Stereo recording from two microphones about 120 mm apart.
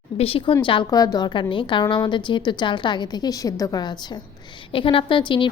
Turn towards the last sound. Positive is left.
turn(degrees=45)  # may be behind; listen again after turning